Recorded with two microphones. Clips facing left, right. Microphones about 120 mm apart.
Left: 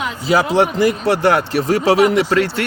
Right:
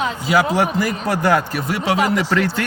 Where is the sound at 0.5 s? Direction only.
25° left (ahead or behind).